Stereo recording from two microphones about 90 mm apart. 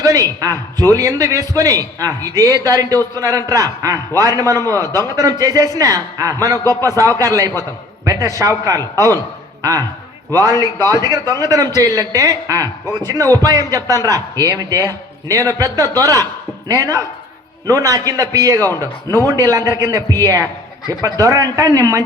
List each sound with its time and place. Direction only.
0.0 s a man's voice: 40° right (ahead or behind)
10.3 s a man's voice: 40° right (ahead or behind)